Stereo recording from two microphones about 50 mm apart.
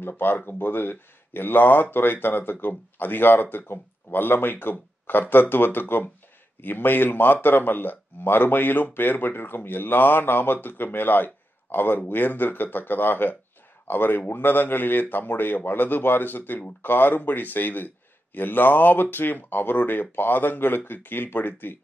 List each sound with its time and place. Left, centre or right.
0.5 s a man's voice: left